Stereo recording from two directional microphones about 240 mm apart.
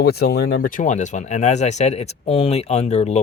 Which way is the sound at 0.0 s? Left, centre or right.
Left.